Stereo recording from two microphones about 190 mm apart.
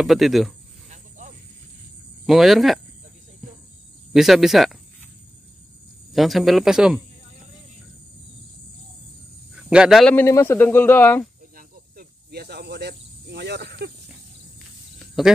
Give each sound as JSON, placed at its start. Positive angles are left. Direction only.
{"t": 0.0, "sound": "speech", "side_deg": 0}
{"t": 0.8, "sound": "snake", "side_deg": -40}
{"t": 2.2, "sound": "speech", "side_deg": 0}
{"t": 4.1, "sound": "speech", "side_deg": 0}
{"t": 6.1, "sound": "speech", "side_deg": 0}
{"t": 9.7, "sound": "speech", "side_deg": -5}
{"t": 10.1, "sound": "speech", "side_deg": 15}
{"t": 11.5, "sound": "snake", "side_deg": -55}
{"t": 15.2, "sound": "speech", "side_deg": 0}